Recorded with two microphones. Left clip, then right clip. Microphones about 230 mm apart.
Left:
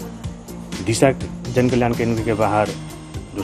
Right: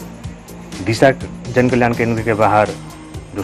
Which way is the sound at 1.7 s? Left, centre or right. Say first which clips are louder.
Right 4 dB; centre.